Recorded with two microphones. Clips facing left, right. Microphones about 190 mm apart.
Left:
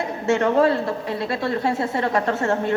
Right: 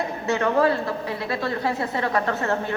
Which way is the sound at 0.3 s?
25° left (ahead or behind).